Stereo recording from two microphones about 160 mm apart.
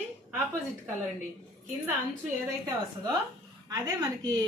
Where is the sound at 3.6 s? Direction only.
25° right (ahead or behind).